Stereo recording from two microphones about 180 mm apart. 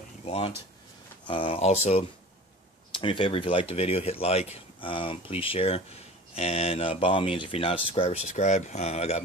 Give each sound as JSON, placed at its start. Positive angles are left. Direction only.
{"t": 0.2, "sound": "speech", "side_deg": 35}